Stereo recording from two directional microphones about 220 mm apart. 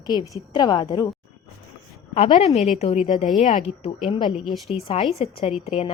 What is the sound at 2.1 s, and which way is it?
A woman's voice, 25° left (ahead or behind).